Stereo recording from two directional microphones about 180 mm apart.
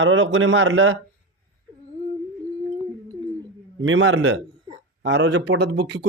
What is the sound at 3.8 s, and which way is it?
A man's voice, 90° right.